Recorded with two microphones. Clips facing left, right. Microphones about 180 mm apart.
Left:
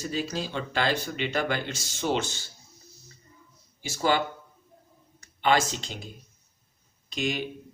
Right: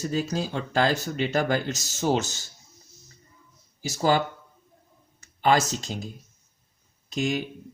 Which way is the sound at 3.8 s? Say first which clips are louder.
Right 3 dB; 40° right (ahead or behind).